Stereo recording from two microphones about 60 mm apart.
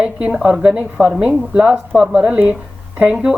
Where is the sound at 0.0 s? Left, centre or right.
Centre.